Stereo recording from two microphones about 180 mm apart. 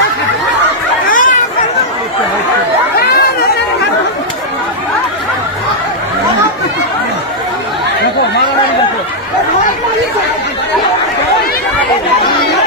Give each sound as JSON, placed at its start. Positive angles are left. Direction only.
{"t": 1.1, "sound": "chatter", "side_deg": 50}
{"t": 3.0, "sound": "chatter", "side_deg": 60}